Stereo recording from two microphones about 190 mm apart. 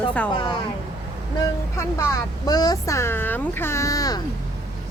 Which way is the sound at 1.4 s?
15° left (ahead or behind).